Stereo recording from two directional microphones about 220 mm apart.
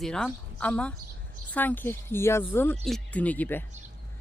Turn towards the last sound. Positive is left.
turn(degrees=10)  # may be behind; listen again after turning